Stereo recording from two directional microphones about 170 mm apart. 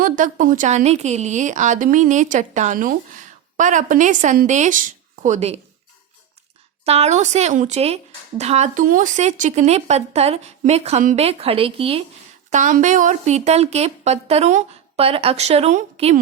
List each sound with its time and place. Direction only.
0.0 s speech: 50° right (ahead or behind)
6.8 s speech: 40° right (ahead or behind)
12.5 s speech: 50° right (ahead or behind)